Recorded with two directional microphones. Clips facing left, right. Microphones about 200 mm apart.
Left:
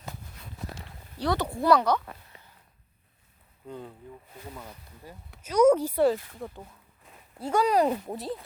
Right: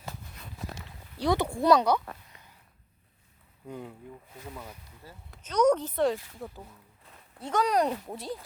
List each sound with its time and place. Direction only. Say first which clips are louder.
1.2 s speech: right 1 dB; 15° right (ahead or behind)
3.7 s speech: even; 15° right (ahead or behind)
5.1 s speech: left 4 dB; 15° left (ahead or behind)